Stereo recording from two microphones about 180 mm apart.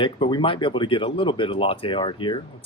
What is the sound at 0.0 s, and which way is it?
Speech, 25° left (ahead or behind).